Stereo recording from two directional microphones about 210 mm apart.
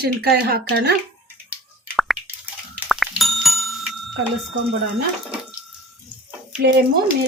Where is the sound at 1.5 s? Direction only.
Centre (ahead or behind).